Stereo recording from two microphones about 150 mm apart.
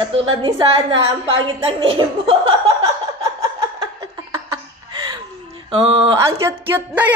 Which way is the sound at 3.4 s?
25° right (ahead or behind).